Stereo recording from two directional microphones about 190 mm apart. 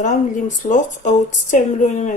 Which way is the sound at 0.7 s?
40° left (ahead or behind).